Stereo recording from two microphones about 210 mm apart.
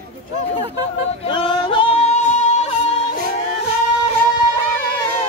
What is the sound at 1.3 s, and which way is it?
Music, 25° left (ahead or behind).